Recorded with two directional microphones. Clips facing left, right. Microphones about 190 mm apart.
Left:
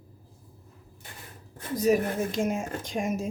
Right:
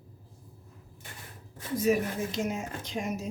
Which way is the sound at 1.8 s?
45° left (ahead or behind).